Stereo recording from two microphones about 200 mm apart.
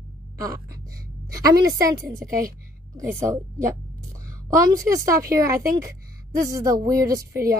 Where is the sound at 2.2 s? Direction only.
45° right (ahead or behind).